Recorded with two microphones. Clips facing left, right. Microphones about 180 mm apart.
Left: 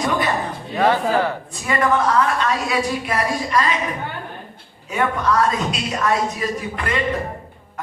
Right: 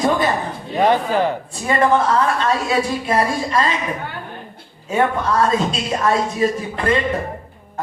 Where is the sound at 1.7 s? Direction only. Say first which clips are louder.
Right 3 dB; 30° right (ahead or behind).